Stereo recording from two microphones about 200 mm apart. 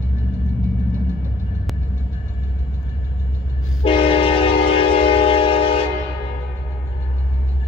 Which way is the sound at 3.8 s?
25° left (ahead or behind).